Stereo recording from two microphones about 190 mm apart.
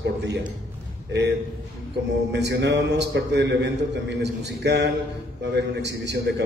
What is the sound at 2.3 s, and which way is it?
A man's voice, 70° right (ahead or behind).